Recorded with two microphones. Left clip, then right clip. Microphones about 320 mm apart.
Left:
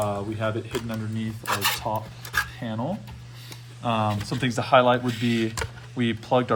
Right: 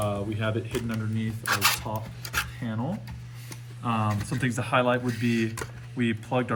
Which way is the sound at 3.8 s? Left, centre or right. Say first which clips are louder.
Left 4 dB; centre.